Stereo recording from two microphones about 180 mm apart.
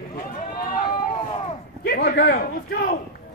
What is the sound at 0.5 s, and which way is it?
Run, 55° left (ahead or behind).